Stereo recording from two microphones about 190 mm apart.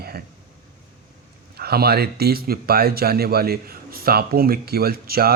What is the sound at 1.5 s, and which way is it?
Speech, 55° right (ahead or behind).